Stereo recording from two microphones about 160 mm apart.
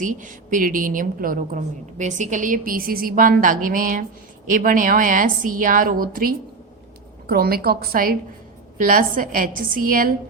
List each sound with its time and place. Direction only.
0.0 s a woman's voice: 55° right (ahead or behind)
7.3 s a woman's voice: 75° right (ahead or behind)